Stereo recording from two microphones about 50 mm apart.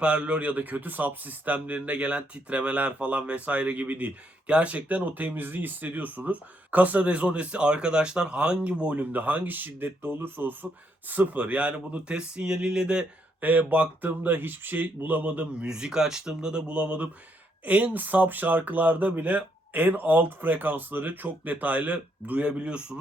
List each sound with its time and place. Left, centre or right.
0.0 s speech: right
9.0 s speech: right
11.1 s speech: right
13.4 s speech: right
15.6 s speech: centre
17.7 s speech: right